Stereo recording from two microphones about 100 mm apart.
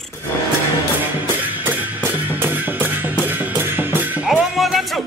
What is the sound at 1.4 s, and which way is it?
Music, 15° right (ahead or behind).